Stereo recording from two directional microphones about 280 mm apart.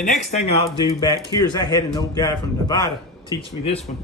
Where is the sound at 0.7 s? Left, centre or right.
Centre.